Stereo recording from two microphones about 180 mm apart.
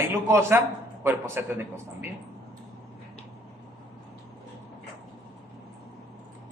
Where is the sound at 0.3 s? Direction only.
15° right (ahead or behind).